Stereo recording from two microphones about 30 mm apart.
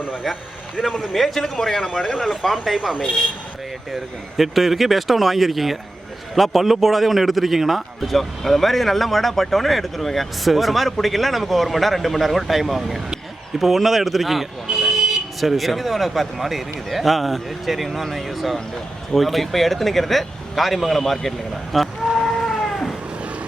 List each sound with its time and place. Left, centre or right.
0.9 s a man's voice: centre
3.9 s a man's voice: centre
14.8 s vehicle: centre
15.4 s a man's voice: centre
22.4 s cat: centre